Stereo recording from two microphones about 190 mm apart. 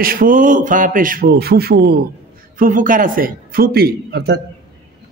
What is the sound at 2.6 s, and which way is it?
A man's voice, 45° right (ahead or behind).